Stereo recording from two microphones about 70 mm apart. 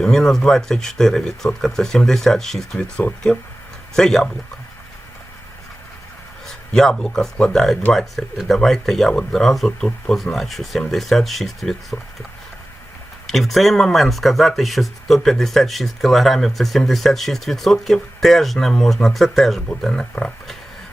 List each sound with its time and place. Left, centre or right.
0.0 s speech: centre
3.3 s speech: left
3.9 s speech: centre
6.7 s speech: centre
13.2 s speech: centre